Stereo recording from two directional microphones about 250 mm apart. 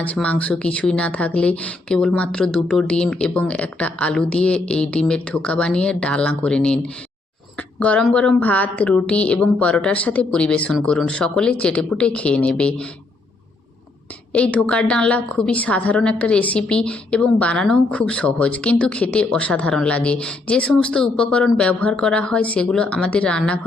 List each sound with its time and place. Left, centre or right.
0.0 s a woman's voice: centre
14.3 s a woman's voice: centre